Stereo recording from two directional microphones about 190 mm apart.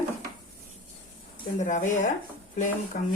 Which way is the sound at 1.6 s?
40° left (ahead or behind).